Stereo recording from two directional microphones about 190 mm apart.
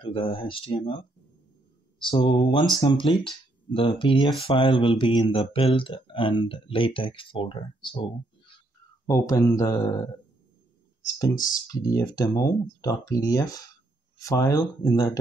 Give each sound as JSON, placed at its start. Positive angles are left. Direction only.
{"t": 0.0, "sound": "speech", "side_deg": 30}
{"t": 2.0, "sound": "speech", "side_deg": 25}
{"t": 9.0, "sound": "speech", "side_deg": 15}
{"t": 11.1, "sound": "speech", "side_deg": 20}